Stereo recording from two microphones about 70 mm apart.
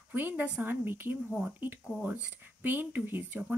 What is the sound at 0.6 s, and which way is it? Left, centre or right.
Speech, right.